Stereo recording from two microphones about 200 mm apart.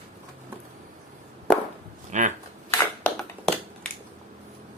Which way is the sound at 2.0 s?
40° right (ahead or behind).